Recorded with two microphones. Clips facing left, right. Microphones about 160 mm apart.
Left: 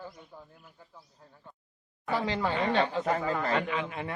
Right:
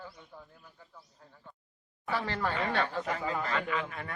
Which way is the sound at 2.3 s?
15° left (ahead or behind).